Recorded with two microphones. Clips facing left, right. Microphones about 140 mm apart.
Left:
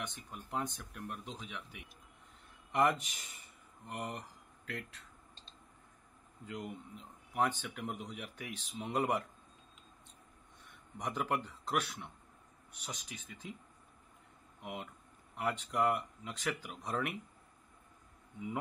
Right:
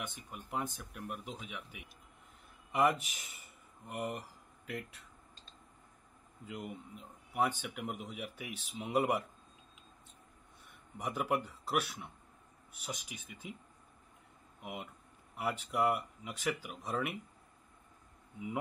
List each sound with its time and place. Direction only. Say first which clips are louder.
0.0 s speech: even; 10° right (ahead or behind)
6.4 s speech: even; 5° right (ahead or behind)
11.0 s speech: right 1 dB; 10° right (ahead or behind)
14.6 s speech: even; 5° right (ahead or behind)